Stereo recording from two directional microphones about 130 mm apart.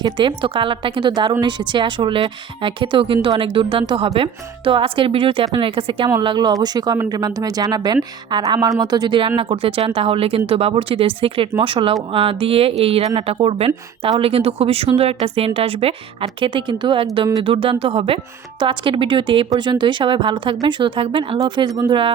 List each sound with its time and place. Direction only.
0.0 s a woman's voice: 40° right (ahead or behind)